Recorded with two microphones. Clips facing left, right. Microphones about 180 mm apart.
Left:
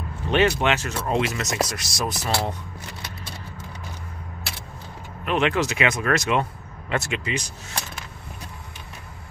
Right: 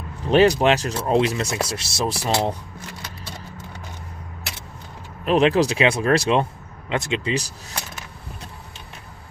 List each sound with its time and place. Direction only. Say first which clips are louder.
0.3 s speech: right 5 dB; 35° right (ahead or behind)
5.2 s speech: right 5 dB; 35° right (ahead or behind)
6.9 s speech: right 2 dB; 20° right (ahead or behind)
7.2 s speech: right 4 dB; 35° right (ahead or behind)